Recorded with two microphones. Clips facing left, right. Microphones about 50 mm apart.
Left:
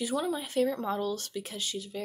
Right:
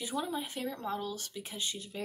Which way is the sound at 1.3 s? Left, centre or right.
Right.